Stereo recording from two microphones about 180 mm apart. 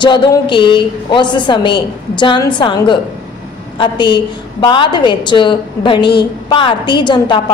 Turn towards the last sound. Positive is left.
turn(degrees=25)  # may be behind; listen again after turning